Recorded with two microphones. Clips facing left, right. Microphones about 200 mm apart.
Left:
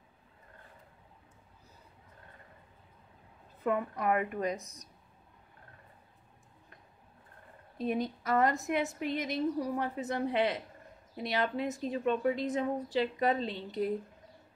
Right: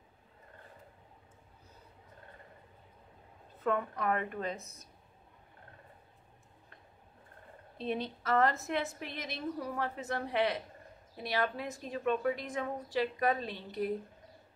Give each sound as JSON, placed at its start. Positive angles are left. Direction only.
{"t": 3.6, "sound": "a woman's voice", "side_deg": 15}
{"t": 7.7, "sound": "a woman's voice", "side_deg": 10}